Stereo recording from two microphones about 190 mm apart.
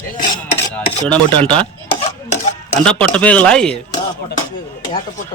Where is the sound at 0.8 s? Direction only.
5° left (ahead or behind).